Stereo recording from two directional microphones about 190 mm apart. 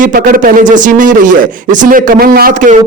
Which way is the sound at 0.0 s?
50° right (ahead or behind).